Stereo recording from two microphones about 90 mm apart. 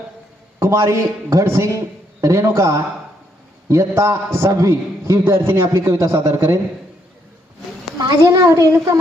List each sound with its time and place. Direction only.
0.6 s a man's voice: 35° right (ahead or behind)
5.2 s a man's voice: 30° right (ahead or behind)
8.4 s a man's voice: 35° right (ahead or behind)